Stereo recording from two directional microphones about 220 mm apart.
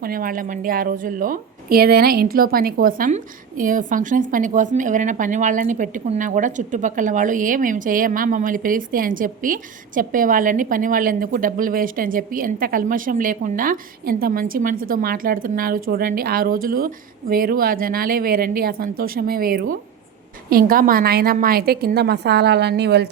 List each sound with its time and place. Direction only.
0.0 s a woman's voice: 40° right (ahead or behind)